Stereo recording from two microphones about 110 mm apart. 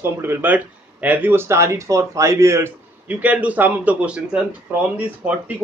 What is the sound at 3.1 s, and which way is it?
Speech, 15° right (ahead or behind).